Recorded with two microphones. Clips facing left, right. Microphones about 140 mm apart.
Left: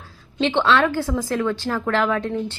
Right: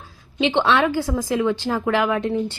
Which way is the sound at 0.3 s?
15° right (ahead or behind).